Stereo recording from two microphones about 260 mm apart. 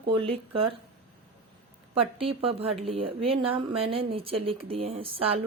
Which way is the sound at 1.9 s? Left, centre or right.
Right.